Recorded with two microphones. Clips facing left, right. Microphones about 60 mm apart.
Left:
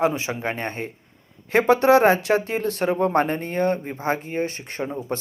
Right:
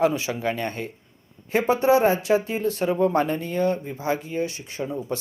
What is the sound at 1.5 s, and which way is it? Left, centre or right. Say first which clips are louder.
Speech: left 3 dB; left.